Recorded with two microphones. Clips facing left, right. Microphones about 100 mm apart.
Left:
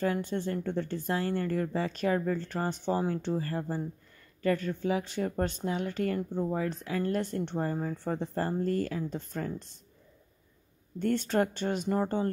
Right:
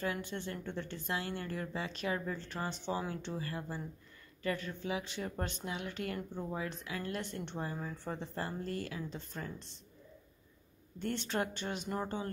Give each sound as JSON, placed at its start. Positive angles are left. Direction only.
{"t": 0.0, "sound": "a woman's voice", "side_deg": 40}
{"t": 11.0, "sound": "speech", "side_deg": 45}